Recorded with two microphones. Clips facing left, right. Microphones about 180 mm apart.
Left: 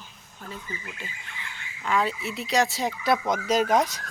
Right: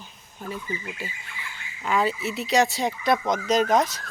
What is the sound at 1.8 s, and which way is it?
Speech, 5° right (ahead or behind).